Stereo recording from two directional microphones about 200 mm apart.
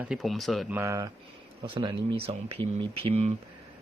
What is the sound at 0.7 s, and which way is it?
Speech, 15° right (ahead or behind).